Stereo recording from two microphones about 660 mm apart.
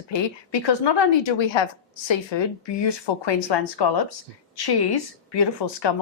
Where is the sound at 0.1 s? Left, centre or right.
Left.